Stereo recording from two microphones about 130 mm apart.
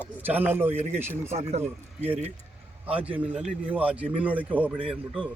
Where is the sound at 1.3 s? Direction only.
55° right (ahead or behind).